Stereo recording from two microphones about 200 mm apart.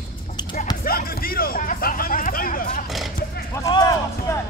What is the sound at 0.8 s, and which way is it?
Music, 50° left (ahead or behind).